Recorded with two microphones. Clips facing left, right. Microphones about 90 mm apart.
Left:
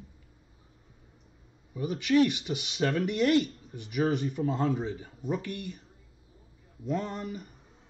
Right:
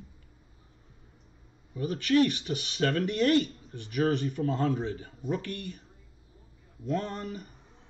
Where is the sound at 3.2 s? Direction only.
35° right (ahead or behind).